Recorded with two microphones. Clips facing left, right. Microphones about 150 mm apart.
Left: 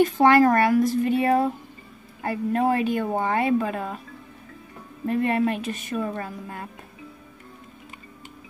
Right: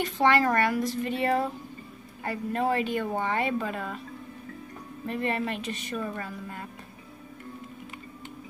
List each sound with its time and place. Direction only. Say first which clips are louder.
0.2 s speech: left 4 dB; 50° left (ahead or behind)
5.0 s speech: left 7 dB; 50° left (ahead or behind)